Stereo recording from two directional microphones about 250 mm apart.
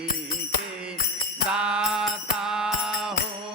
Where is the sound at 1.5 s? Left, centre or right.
Centre.